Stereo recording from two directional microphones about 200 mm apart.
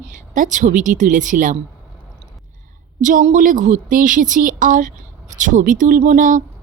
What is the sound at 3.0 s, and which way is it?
Speech, 40° right (ahead or behind).